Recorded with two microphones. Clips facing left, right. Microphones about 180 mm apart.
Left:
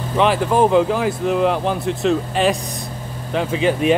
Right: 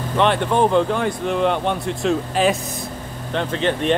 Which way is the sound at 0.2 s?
5° left (ahead or behind).